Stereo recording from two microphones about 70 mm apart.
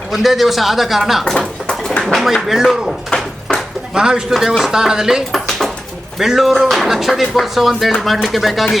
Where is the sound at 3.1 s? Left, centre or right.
Centre.